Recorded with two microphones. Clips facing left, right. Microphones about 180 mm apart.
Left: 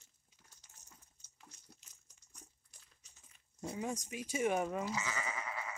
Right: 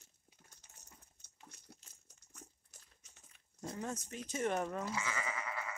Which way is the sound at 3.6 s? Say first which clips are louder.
Left 2 dB; 10° left (ahead or behind).